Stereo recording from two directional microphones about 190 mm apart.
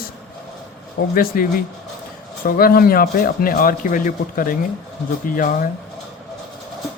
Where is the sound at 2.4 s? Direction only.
50° left (ahead or behind).